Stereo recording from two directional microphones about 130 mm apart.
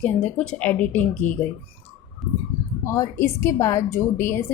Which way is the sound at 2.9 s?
20° left (ahead or behind).